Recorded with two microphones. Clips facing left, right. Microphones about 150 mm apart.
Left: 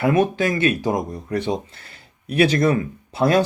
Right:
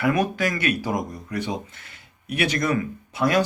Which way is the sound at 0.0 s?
25° left (ahead or behind).